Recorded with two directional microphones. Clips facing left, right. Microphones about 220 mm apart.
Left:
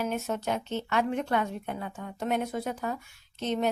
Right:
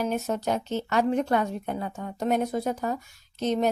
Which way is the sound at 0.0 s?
35° right (ahead or behind).